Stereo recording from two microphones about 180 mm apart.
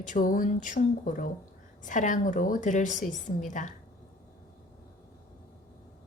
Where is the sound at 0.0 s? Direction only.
50° left (ahead or behind).